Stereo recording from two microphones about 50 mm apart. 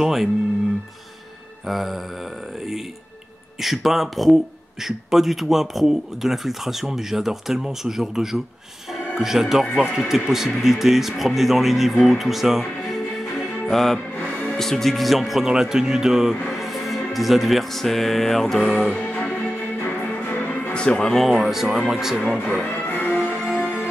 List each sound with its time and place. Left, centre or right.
0.0 s speech: centre
1.7 s speech: centre
3.6 s speech: centre
13.7 s music: centre
14.6 s speech: centre
16.4 s music: centre
19.8 s music: left
20.7 s speech: centre
21.2 s speech: centre
22.8 s music: left
23.2 s music: right